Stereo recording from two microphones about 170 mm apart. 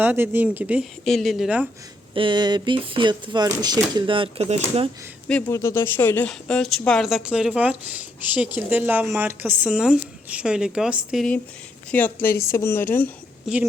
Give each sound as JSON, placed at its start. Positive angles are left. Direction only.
{"t": 0.0, "sound": "speech", "side_deg": -10}
{"t": 2.1, "sound": "speech", "side_deg": -30}
{"t": 5.3, "sound": "speech", "side_deg": 15}
{"t": 11.9, "sound": "speech", "side_deg": 10}
{"t": 12.2, "sound": "a woman's voice", "side_deg": 60}
{"t": 12.5, "sound": "speech", "side_deg": 15}
{"t": 13.5, "sound": "speech", "side_deg": 0}